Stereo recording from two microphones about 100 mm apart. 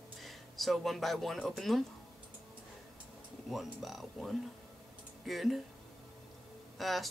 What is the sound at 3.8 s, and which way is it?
Speech, centre (ahead or behind).